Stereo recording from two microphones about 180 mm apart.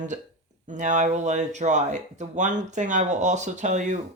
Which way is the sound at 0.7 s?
40° right (ahead or behind).